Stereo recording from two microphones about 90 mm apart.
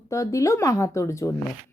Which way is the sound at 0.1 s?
35° left (ahead or behind).